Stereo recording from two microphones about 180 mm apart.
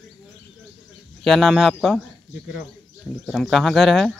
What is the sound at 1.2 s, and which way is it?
Speech, centre (ahead or behind).